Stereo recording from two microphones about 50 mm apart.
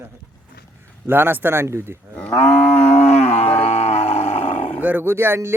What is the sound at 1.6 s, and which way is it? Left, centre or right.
Speech, right.